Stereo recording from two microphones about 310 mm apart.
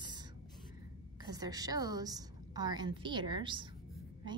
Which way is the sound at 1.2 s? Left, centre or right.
Centre.